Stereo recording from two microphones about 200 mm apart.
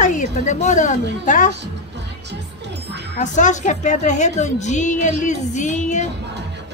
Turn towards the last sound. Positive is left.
turn(degrees=35)  # may be behind; listen again after turning